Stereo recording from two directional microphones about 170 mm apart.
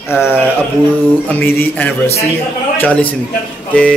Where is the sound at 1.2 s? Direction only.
10° left (ahead or behind).